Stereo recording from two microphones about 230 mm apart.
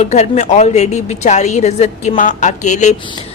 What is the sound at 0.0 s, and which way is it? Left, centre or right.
A woman's voice, left.